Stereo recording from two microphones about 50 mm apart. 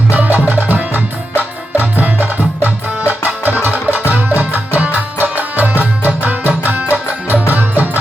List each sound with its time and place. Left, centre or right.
0.1 s music: right